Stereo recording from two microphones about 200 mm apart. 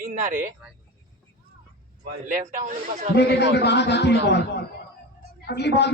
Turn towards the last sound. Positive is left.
turn(degrees=60)  # may be behind; listen again after turning